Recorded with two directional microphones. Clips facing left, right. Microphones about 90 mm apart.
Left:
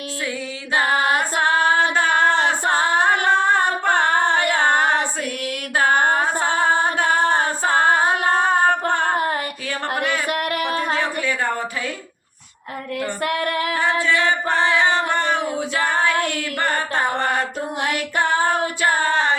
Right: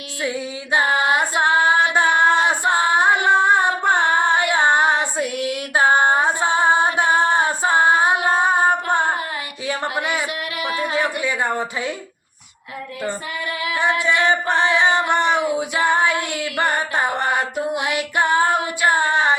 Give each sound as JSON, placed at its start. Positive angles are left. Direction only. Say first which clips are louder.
{"t": 0.3, "sound": "music", "louder": "right 4 dB", "side_deg": -20}
{"t": 0.9, "sound": "female singing", "louder": "right 1 dB", "side_deg": -15}
{"t": 3.2, "sound": "singing", "louder": "right 2 dB", "side_deg": -15}
{"t": 10.2, "sound": "singing", "louder": "left 3 dB", "side_deg": 50}
{"t": 10.9, "sound": "a sound", "louder": "right 1 dB", "side_deg": -15}
{"t": 13.2, "sound": "female singing", "louder": "left 5 dB", "side_deg": 60}
{"t": 14.0, "sound": "singing", "louder": "right 1 dB", "side_deg": -20}